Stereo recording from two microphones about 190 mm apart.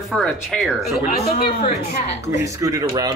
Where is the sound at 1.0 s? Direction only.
30° left (ahead or behind).